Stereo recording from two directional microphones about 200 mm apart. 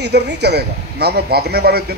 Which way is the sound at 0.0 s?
55° right (ahead or behind).